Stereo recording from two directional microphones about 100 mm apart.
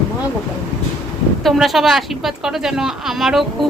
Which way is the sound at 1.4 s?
Centre (ahead or behind).